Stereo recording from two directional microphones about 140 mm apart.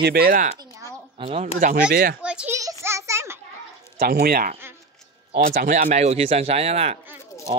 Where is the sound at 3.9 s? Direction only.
90° right.